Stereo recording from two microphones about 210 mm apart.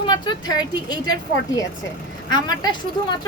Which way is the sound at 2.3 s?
20° left (ahead or behind).